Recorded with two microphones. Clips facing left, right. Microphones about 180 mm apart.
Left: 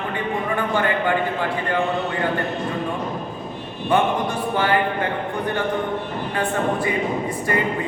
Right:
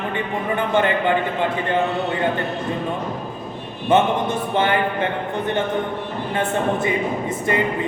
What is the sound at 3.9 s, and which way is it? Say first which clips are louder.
A man's voice: right 2 dB; 20° right (ahead or behind).